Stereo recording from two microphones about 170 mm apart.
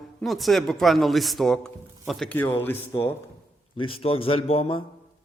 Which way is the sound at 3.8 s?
30° left (ahead or behind).